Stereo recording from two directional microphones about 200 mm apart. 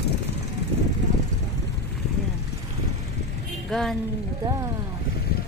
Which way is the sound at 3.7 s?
Centre (ahead or behind).